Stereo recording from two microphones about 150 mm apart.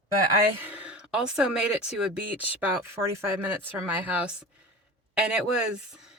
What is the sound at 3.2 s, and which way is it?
A woman's voice, 10° right (ahead or behind).